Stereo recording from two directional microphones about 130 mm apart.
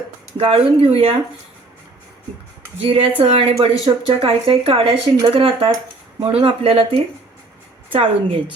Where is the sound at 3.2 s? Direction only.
45° right (ahead or behind).